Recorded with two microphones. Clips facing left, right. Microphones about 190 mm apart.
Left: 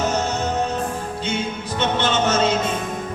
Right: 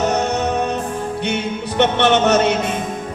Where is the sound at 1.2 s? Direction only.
65° right (ahead or behind).